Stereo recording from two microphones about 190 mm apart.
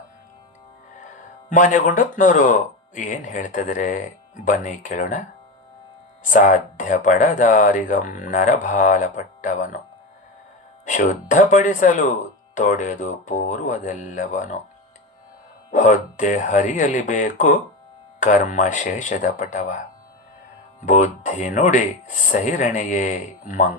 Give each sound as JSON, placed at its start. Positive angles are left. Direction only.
{"t": 1.5, "sound": "speech", "side_deg": 40}
{"t": 6.3, "sound": "speech", "side_deg": 45}
{"t": 10.8, "sound": "speech", "side_deg": 40}
{"t": 15.7, "sound": "speech", "side_deg": 40}
{"t": 20.8, "sound": "speech", "side_deg": 40}